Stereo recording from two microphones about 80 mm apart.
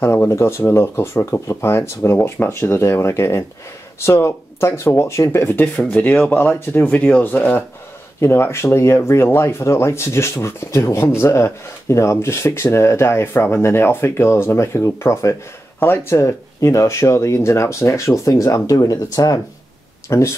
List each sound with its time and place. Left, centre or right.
0.0 s speech: left
5.9 s speech: left
8.2 s speech: left
20.1 s speech: left